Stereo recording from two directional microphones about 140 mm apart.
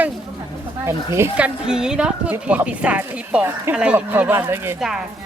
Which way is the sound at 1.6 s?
5° right (ahead or behind).